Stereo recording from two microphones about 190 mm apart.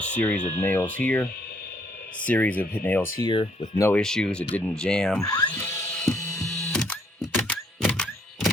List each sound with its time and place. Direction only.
0.0 s speech: 10° left (ahead or behind)
3.2 s speech: 25° left (ahead or behind); by 5.3 s centre (ahead or behind)
5.3 s music: 15° left (ahead or behind)
6.1 s mechanisms: 15° left (ahead or behind)
6.7 s a sound: 5° left (ahead or behind)